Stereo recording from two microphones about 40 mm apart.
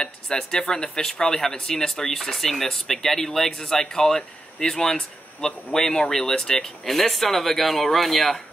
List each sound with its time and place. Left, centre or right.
0.0 s speech: centre
6.9 s speech: centre